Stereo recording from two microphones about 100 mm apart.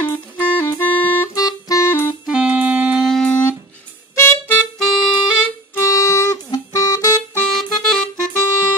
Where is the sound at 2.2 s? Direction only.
10° right (ahead or behind).